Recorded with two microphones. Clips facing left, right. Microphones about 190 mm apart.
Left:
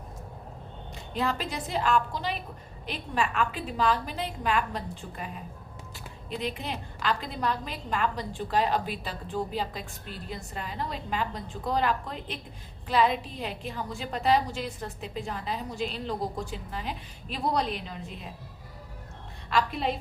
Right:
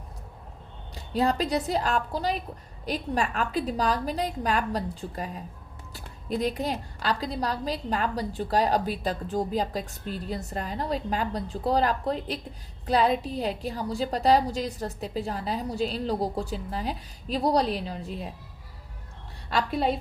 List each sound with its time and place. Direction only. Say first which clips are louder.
0.9 s a woman's voice: right 5 dB; 35° right (ahead or behind)
19.5 s a woman's voice: right 2 dB; 35° right (ahead or behind)